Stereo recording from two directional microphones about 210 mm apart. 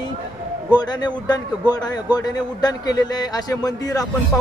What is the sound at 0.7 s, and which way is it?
A man's voice, 20° left (ahead or behind).